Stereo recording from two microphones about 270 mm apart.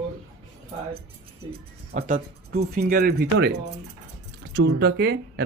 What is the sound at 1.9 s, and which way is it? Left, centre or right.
Speech, right.